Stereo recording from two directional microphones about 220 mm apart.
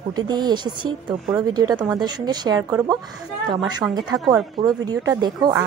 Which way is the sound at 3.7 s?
20° right (ahead or behind).